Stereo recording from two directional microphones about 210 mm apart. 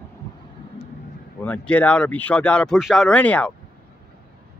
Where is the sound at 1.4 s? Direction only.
5° left (ahead or behind).